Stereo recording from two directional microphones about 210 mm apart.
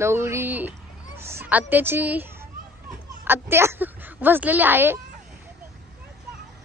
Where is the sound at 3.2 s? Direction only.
10° right (ahead or behind).